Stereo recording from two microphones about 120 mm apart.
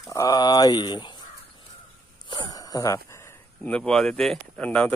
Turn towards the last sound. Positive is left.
turn(degrees=10)  # may be behind; listen again after turning